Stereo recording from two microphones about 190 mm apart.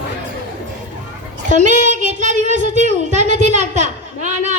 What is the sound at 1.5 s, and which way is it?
Child singing, 40° right (ahead or behind).